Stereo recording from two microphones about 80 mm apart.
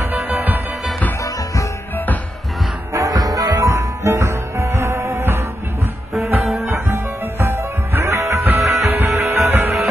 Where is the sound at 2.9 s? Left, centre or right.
Right.